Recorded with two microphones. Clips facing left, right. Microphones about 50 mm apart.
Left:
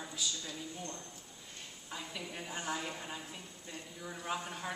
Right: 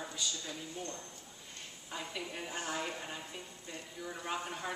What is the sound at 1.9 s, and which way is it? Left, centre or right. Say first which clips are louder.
A woman's voice: right 2 dB; centre.